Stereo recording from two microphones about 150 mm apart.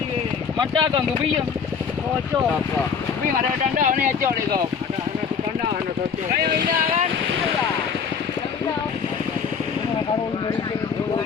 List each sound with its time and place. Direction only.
0.6 s speech: 30° right (ahead or behind)
3.8 s speech: 60° right (ahead or behind)
6.4 s speech: 75° right (ahead or behind)